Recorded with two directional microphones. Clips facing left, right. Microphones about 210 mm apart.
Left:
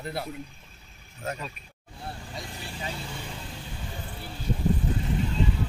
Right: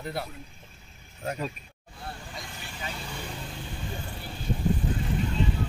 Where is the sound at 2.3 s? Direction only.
30° left (ahead or behind).